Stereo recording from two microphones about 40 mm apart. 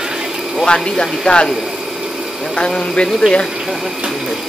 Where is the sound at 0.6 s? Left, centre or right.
Centre.